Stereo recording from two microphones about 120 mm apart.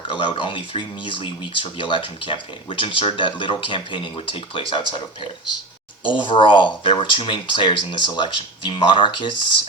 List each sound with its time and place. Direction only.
0.1 s speech: 45° left (ahead or behind)